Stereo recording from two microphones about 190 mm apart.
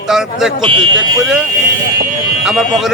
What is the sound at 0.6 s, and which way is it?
Speech, 25° right (ahead or behind).